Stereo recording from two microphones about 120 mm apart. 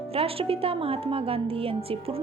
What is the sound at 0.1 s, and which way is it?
A woman's voice, 55° right (ahead or behind).